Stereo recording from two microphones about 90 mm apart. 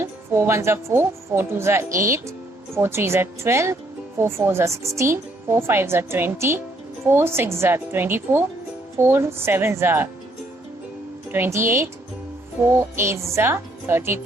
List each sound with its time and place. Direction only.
0.0 s a woman's voice: 25° right (ahead or behind)
11.3 s a woman's voice: 25° right (ahead or behind)